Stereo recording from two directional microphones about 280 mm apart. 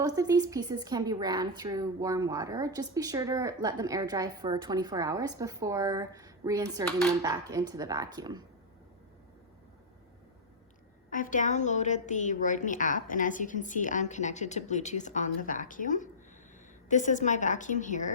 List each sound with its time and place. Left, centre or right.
0.0 s a woman's voice: centre
11.1 s a woman's voice: left